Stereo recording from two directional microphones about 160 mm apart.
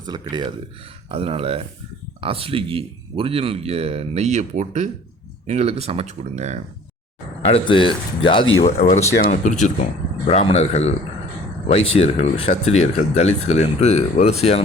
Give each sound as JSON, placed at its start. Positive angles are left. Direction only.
{"t": 0.0, "sound": "speech", "side_deg": -25}
{"t": 7.4, "sound": "speech", "side_deg": 35}
{"t": 9.3, "sound": "speech", "side_deg": 50}
{"t": 10.2, "sound": "speech", "side_deg": 40}